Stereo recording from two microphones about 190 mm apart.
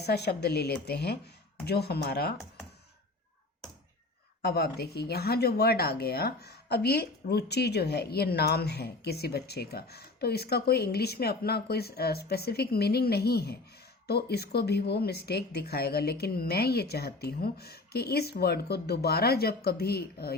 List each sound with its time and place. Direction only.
0.0 s speech: 60° left (ahead or behind)
4.4 s speech: 55° left (ahead or behind)